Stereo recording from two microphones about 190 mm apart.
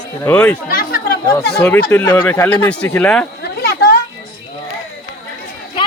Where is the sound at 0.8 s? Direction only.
50° left (ahead or behind).